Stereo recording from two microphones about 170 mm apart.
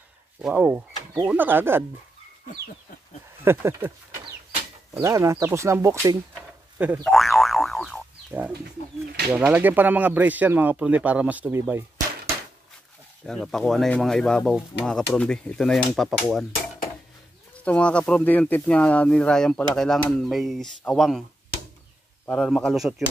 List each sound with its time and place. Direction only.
0.4 s speech: 5° right (ahead or behind)
3.4 s speech: 15° right (ahead or behind)
5.0 s speech: 15° right (ahead or behind)
7.1 s boing: centre (ahead or behind)
8.3 s speech: 10° right (ahead or behind)
13.2 s speech: centre (ahead or behind)
22.2 s speech: 5° left (ahead or behind)